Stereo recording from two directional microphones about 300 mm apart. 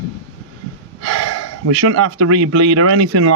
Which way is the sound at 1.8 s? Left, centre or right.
Right.